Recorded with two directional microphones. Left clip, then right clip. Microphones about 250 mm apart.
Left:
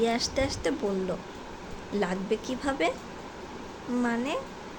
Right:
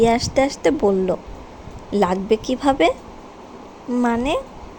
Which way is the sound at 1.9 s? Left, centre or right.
Right.